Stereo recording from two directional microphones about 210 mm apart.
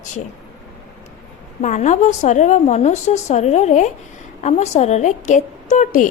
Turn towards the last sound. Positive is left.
turn(degrees=35)  # may be behind; listen again after turning